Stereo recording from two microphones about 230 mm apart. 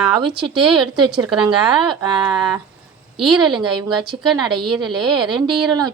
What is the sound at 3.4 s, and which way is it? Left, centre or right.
A woman's voice, right.